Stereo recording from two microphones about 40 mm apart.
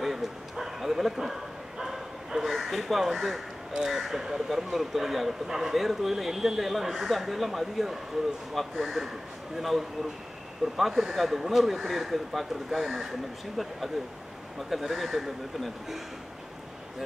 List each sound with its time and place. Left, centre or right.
0.0 s bow-wow: centre
2.5 s a sound: centre
3.0 s speech: centre
14.7 s speech: centre